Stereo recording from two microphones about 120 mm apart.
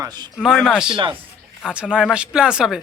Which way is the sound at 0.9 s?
40° right (ahead or behind).